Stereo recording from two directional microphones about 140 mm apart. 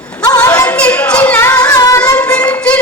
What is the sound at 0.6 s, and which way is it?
Yodeling, 10° left (ahead or behind).